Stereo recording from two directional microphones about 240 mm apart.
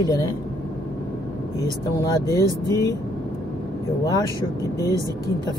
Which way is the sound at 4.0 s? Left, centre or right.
Centre.